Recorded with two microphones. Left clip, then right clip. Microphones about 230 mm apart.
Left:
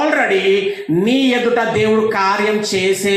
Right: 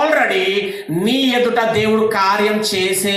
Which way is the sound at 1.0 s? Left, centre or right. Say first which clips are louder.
Right 1 dB; right.